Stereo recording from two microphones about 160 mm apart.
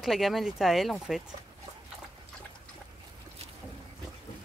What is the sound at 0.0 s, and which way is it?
Speech, centre (ahead or behind).